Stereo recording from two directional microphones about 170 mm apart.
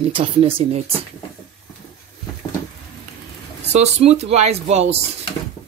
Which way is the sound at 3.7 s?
40° right (ahead or behind).